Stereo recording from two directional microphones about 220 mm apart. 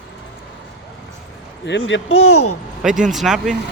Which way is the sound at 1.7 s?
55° left (ahead or behind).